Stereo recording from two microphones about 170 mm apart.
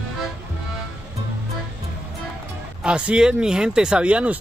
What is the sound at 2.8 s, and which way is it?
Speech, 5° right (ahead or behind).